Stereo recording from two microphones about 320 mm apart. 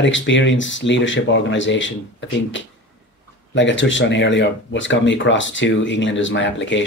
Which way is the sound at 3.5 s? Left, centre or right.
Left.